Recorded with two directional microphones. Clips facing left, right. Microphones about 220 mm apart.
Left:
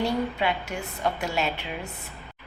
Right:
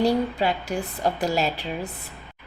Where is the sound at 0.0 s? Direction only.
35° right (ahead or behind).